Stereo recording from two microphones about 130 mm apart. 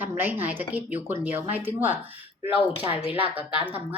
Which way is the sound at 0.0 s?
15° right (ahead or behind).